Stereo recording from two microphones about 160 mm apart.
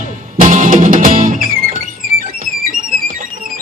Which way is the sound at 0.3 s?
55° right (ahead or behind).